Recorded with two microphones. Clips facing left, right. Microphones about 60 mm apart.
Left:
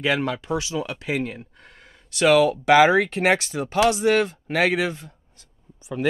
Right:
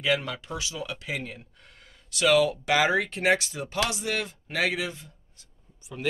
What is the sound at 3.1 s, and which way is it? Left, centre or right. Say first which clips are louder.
Speech: left 4 dB; left.